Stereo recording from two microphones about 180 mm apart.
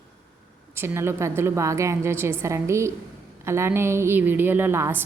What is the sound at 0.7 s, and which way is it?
A woman's voice, 15° right (ahead or behind).